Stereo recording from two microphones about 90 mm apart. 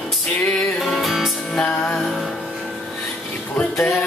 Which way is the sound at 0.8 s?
Centre (ahead or behind).